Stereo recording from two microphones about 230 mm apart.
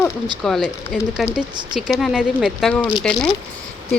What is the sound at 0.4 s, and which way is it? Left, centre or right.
Speech, centre.